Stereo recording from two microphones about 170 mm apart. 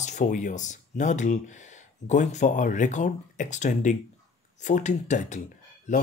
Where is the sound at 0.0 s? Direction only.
45° left (ahead or behind).